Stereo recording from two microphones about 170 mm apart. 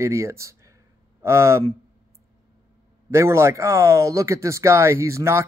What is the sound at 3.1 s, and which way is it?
Speech, 15° right (ahead or behind).